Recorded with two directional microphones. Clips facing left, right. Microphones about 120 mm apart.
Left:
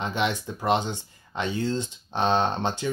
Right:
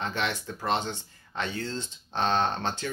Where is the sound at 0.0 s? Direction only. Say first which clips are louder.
Left 4 dB; 15° left (ahead or behind).